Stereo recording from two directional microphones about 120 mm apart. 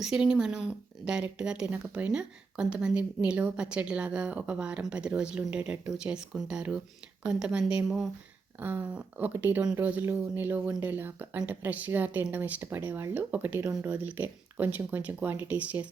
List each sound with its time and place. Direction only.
0.0 s a woman's voice: 5° right (ahead or behind)
8.6 s speech: 15° right (ahead or behind)